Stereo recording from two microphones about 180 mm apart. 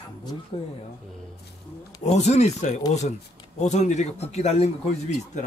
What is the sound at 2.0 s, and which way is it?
Speech, 40° left (ahead or behind).